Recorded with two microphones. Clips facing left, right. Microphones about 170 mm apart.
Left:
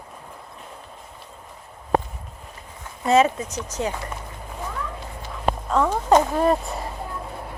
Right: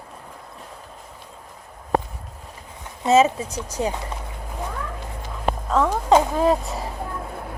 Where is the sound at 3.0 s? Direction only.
20° right (ahead or behind).